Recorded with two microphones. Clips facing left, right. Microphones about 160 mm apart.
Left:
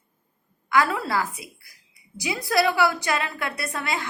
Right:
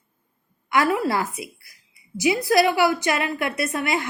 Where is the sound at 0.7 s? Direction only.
20° right (ahead or behind).